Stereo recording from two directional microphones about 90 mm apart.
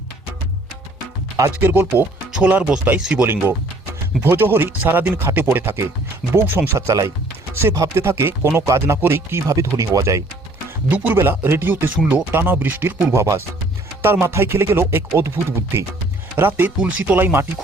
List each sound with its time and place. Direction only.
1.6 s speech: 20° right (ahead or behind)
4.2 s speech: 25° right (ahead or behind)
9.5 s speech: 40° right (ahead or behind)
10.8 s speech: 20° right (ahead or behind)